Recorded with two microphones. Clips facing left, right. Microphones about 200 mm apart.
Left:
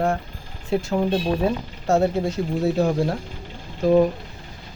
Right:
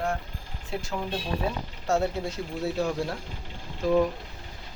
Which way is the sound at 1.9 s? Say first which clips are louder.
Left 7 dB; 45° left (ahead or behind).